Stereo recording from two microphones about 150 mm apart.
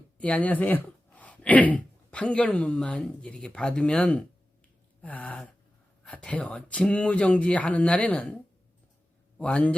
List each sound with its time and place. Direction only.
0.2 s speech: 10° left (ahead or behind)
9.4 s speech: 10° left (ahead or behind)